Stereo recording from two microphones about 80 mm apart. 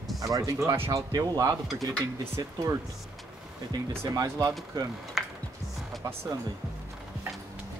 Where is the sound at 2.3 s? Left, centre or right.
Right.